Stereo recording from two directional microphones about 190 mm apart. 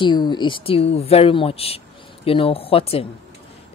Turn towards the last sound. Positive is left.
turn(degrees=30)  # may be behind; listen again after turning